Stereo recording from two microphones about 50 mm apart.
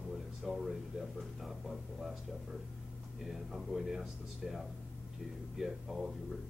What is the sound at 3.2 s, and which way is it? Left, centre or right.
Speech, centre.